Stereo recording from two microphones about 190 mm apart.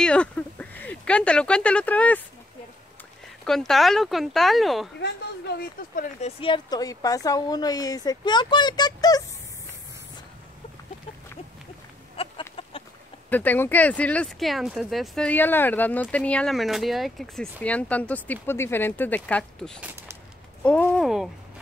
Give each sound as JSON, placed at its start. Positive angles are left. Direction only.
{"t": 0.0, "sound": "speech", "side_deg": 5}
{"t": 3.4, "sound": "speech", "side_deg": 0}
{"t": 5.0, "sound": "speech", "side_deg": 60}
{"t": 6.2, "sound": "a woman's voice", "side_deg": 25}
{"t": 12.2, "sound": "chicken", "side_deg": 30}
{"t": 13.3, "sound": "speech", "side_deg": 10}
{"t": 19.8, "sound": "a sound", "side_deg": -10}
{"t": 20.6, "sound": "speech", "side_deg": 5}